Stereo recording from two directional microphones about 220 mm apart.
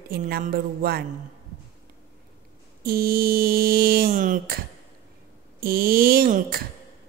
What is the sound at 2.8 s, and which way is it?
Mantra, 40° right (ahead or behind).